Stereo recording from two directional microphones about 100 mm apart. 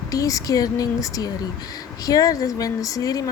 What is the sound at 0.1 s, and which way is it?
Speech, 35° left (ahead or behind).